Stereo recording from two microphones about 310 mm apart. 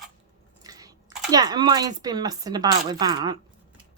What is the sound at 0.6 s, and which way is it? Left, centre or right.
Biting, centre.